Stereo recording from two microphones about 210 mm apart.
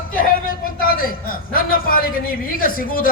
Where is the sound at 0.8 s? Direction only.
45° left (ahead or behind).